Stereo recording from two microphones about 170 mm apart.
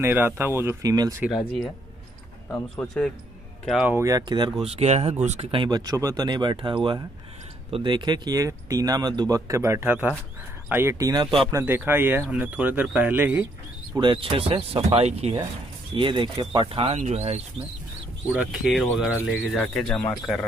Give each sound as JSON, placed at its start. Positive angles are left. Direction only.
{"t": 0.0, "sound": "speech", "side_deg": -15}
{"t": 2.5, "sound": "speech", "side_deg": 5}
{"t": 3.9, "sound": "speech", "side_deg": -20}
{"t": 4.6, "sound": "speech", "side_deg": -40}
{"t": 13.9, "sound": "speech", "side_deg": -25}
{"t": 15.9, "sound": "speech", "side_deg": -30}
{"t": 18.3, "sound": "speech", "side_deg": -5}